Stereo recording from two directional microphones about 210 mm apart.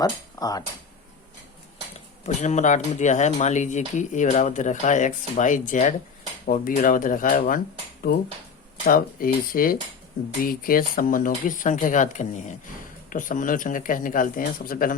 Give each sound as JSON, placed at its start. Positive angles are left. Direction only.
{"t": 0.0, "sound": "speech", "side_deg": 20}
{"t": 2.2, "sound": "speech", "side_deg": 35}
{"t": 8.9, "sound": "speech", "side_deg": 45}